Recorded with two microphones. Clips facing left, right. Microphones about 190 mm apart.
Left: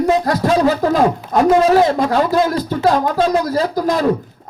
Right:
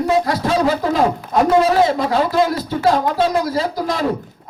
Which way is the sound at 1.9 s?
45° left (ahead or behind).